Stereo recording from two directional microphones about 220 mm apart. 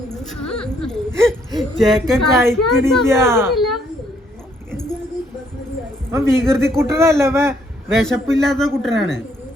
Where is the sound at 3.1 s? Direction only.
10° right (ahead or behind).